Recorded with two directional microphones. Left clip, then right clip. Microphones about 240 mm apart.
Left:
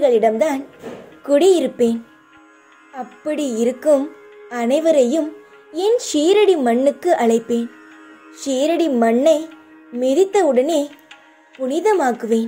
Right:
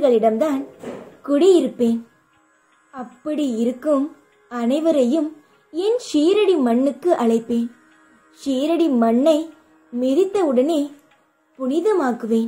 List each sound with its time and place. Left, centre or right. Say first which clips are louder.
0.0 s speech: left 2 dB; left